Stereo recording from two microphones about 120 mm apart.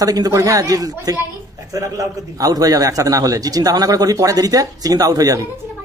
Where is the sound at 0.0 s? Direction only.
30° right (ahead or behind).